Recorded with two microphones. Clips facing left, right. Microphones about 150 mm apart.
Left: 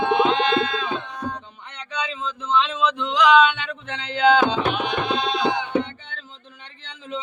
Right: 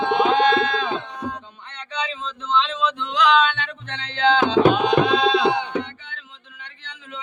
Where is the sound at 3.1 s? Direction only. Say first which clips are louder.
Left 3 dB; 15° left (ahead or behind).